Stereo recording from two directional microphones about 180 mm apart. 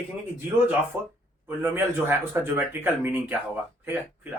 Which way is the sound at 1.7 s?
10° right (ahead or behind).